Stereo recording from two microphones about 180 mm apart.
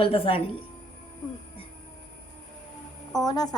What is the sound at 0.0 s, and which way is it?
Speech, 30° left (ahead or behind).